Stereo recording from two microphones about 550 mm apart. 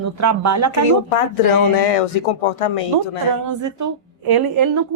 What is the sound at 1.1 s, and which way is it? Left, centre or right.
Speech, left.